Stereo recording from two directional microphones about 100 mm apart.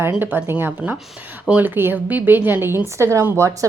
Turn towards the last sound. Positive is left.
turn(degrees=-25)  # may be behind; listen again after turning